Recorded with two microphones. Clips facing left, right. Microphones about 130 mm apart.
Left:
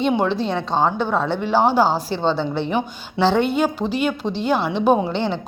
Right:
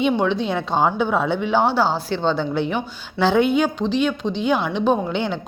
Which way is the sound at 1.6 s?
40° left (ahead or behind).